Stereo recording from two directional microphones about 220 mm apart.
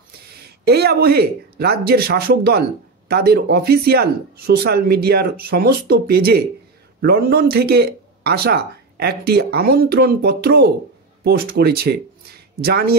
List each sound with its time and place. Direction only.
0.4 s speech: 45° right (ahead or behind)